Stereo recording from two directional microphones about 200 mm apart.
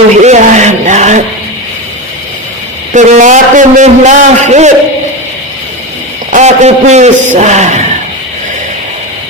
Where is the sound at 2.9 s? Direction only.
40° right (ahead or behind).